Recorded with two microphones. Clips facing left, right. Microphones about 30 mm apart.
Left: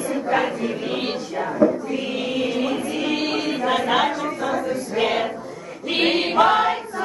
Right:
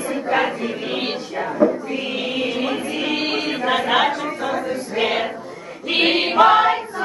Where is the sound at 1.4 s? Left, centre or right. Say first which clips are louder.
Right 1 dB; centre.